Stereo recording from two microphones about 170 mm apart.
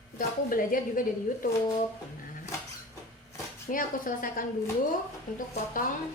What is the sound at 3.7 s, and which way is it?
A woman's voice, 55° left (ahead or behind).